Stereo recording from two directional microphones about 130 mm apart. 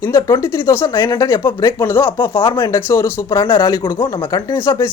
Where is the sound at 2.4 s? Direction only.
40° left (ahead or behind).